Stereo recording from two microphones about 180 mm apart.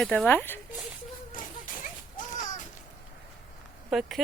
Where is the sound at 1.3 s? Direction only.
50° left (ahead or behind).